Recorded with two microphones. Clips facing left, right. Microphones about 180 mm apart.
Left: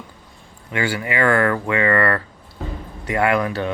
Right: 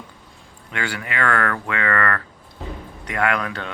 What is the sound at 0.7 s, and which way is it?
Speech, 5° left (ahead or behind).